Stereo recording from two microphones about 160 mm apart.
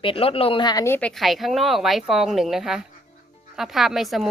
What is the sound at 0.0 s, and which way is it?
Speech, 35° left (ahead or behind).